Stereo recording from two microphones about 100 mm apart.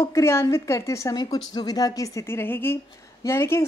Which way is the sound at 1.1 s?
45° left (ahead or behind).